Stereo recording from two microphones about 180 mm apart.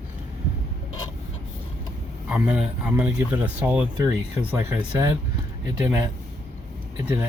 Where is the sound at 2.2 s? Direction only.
10° right (ahead or behind).